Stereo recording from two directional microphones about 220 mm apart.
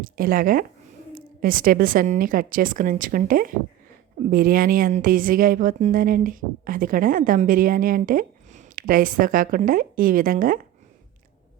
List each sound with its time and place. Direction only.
0.0 s a woman's voice: 40° right (ahead or behind)